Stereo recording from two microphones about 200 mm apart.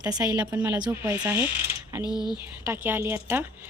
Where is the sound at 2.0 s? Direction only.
20° left (ahead or behind).